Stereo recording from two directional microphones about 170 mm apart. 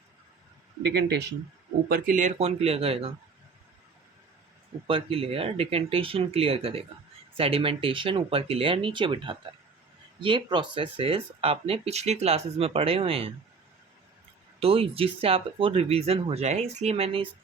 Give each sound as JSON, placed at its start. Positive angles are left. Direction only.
{"t": 1.0, "sound": "a man's voice", "side_deg": -85}
{"t": 1.9, "sound": "speech", "side_deg": -50}
{"t": 4.9, "sound": "speech", "side_deg": -35}
{"t": 14.6, "sound": "speech", "side_deg": -35}